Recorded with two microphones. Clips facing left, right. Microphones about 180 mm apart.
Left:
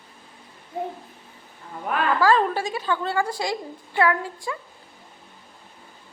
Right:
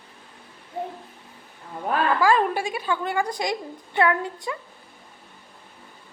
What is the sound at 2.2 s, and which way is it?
A woman's voice, 15° right (ahead or behind).